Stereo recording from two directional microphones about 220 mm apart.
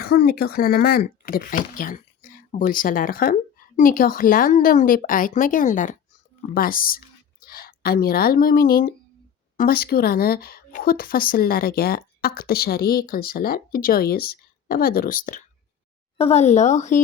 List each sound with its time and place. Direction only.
0.0 s a woman's voice: 45° left (ahead or behind)